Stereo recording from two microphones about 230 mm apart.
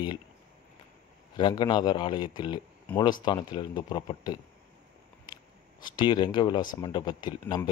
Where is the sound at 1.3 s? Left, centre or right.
Centre.